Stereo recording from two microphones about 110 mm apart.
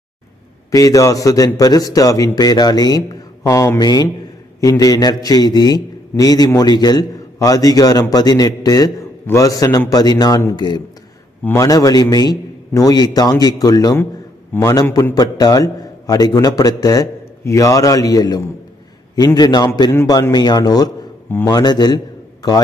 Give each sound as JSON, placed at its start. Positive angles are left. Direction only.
{"t": 0.7, "sound": "a man's voice", "side_deg": 30}
{"t": 11.4, "sound": "a man's voice", "side_deg": 30}